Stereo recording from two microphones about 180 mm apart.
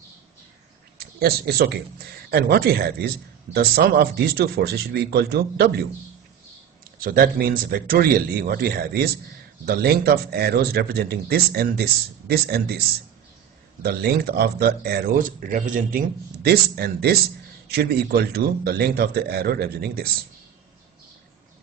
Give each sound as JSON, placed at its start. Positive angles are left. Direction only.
{"t": 0.9, "sound": "speech", "side_deg": -60}
{"t": 7.0, "sound": "speech", "side_deg": -50}
{"t": 13.8, "sound": "speech", "side_deg": -60}